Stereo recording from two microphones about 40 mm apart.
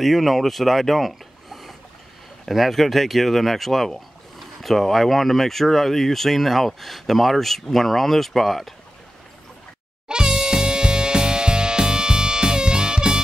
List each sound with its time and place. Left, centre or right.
0.0 s speech: centre
10.0 s music: centre